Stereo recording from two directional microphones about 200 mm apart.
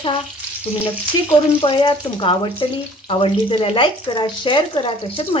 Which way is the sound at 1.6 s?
25° left (ahead or behind).